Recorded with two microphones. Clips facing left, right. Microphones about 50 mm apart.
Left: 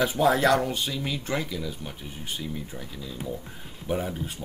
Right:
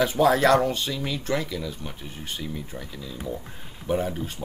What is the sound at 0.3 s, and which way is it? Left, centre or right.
Speech, centre.